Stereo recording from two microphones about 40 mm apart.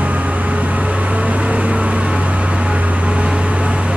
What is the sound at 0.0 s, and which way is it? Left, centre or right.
Vehicle, right.